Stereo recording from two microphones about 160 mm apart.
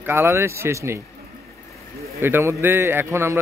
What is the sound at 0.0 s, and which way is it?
Speech, 15° right (ahead or behind).